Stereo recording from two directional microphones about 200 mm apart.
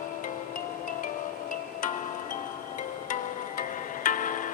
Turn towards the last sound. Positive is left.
turn(degrees=40)  # may be behind; listen again after turning